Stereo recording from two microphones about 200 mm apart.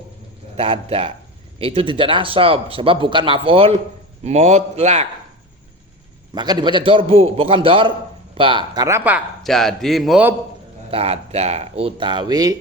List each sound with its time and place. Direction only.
0.5 s a man's voice: 30° right (ahead or behind)
6.3 s speech: 20° right (ahead or behind); by 10.3 s 5° right (ahead or behind)
10.9 s speech: 30° right (ahead or behind)